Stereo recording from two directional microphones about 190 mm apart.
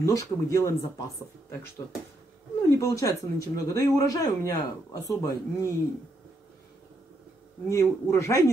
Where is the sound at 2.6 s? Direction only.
15° left (ahead or behind).